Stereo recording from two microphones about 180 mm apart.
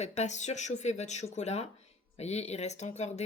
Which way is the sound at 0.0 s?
40° left (ahead or behind).